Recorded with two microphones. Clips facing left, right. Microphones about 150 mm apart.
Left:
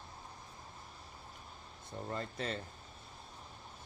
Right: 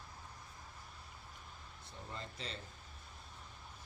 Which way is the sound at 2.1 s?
55° left (ahead or behind).